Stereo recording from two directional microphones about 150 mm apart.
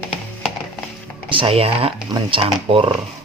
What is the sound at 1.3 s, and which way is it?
Speech, 35° right (ahead or behind).